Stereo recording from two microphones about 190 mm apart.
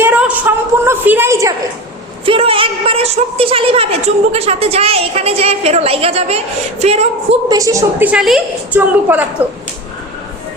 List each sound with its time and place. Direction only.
0.0 s a sound: 5° right (ahead or behind)
2.2 s a woman's voice: 30° right (ahead or behind)
7.4 s a woman's voice: 20° right (ahead or behind)